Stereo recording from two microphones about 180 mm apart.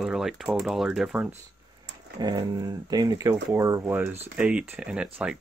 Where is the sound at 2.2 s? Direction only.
20° right (ahead or behind).